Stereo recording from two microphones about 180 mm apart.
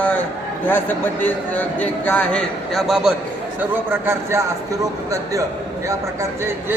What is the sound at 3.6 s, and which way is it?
Speech, 10° right (ahead or behind).